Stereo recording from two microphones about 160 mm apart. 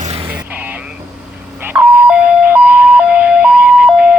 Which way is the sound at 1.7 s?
10° right (ahead or behind).